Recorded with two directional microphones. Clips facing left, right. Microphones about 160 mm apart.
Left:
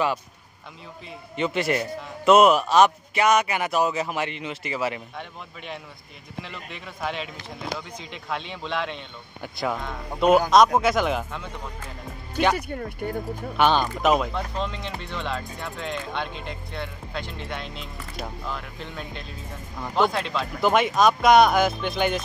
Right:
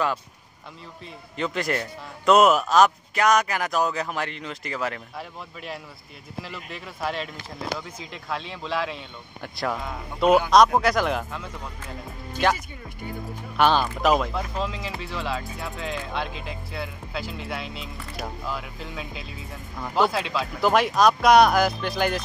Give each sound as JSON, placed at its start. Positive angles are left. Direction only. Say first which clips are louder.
{"t": 1.3, "sound": "speech", "louder": "left 2 dB", "side_deg": 0}
{"t": 12.5, "sound": "speech", "louder": "left 10 dB", "side_deg": 60}
{"t": 13.6, "sound": "speech", "louder": "even", "side_deg": 0}